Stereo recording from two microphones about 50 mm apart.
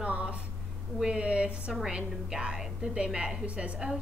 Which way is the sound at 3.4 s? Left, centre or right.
Right.